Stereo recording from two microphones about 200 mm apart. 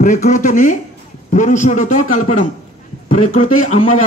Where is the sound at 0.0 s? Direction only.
40° left (ahead or behind).